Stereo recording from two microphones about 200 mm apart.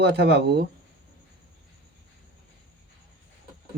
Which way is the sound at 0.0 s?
55° right (ahead or behind).